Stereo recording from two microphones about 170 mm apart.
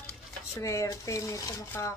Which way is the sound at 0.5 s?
20° left (ahead or behind).